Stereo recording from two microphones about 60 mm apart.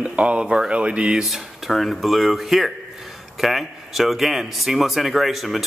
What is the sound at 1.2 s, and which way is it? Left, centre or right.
Speech, centre.